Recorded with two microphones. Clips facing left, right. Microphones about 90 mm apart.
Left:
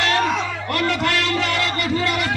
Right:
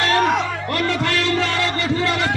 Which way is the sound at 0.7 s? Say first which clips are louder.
Left 1 dB; 30° right (ahead or behind).